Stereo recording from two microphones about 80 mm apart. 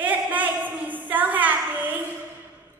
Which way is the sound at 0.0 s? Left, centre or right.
Right.